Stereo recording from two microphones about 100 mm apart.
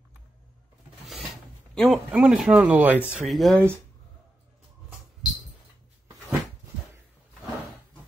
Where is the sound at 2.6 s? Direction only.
15° right (ahead or behind).